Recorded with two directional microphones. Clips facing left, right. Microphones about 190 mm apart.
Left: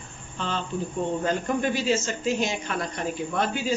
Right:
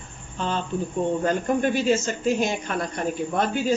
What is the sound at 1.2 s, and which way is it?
Speech, 45° right (ahead or behind).